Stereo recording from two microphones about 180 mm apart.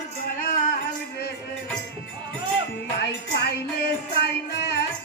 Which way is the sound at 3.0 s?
65° left (ahead or behind).